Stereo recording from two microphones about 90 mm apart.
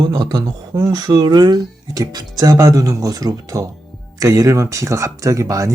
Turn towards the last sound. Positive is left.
turn(degrees=-35)  # may be behind; listen again after turning